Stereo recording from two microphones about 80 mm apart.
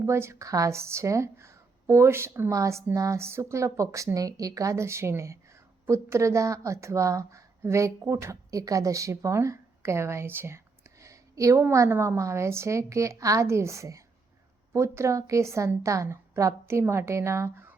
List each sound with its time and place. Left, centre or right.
0.0 s a woman's voice: right